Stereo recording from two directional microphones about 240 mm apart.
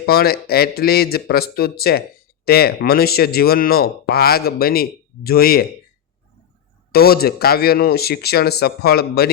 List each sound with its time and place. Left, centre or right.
0.0 s speech: left
6.9 s speech: left